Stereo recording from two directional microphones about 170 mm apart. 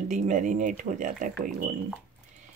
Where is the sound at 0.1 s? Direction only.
50° right (ahead or behind).